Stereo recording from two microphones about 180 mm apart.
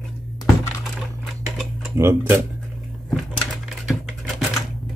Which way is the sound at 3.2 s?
Centre (ahead or behind).